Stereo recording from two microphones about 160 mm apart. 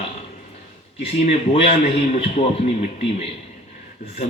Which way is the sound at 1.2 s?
40° left (ahead or behind).